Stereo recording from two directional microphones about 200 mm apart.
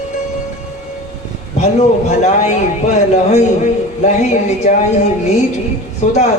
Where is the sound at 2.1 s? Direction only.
35° left (ahead or behind).